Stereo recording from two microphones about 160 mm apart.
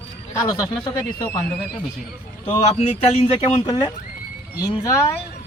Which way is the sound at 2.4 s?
45° left (ahead or behind).